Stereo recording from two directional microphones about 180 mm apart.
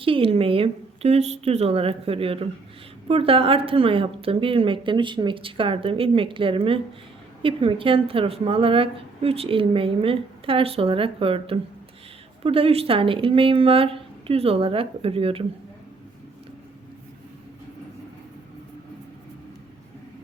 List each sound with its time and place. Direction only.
0.0 s a woman's voice: 30° right (ahead or behind)